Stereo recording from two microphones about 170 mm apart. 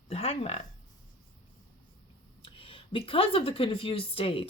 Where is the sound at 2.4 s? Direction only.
30° left (ahead or behind).